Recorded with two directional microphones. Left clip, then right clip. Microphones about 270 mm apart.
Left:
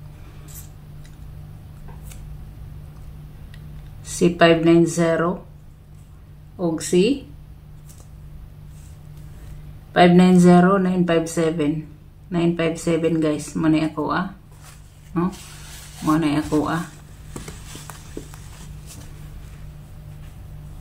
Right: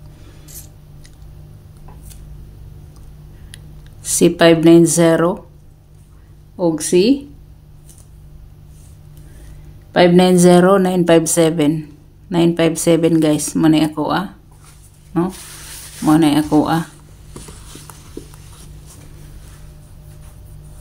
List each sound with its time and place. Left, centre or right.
3.5 s speech: right
6.6 s speech: right
9.9 s speech: right